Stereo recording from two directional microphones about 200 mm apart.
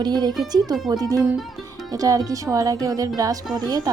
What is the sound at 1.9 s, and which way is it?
Speech, 15° right (ahead or behind).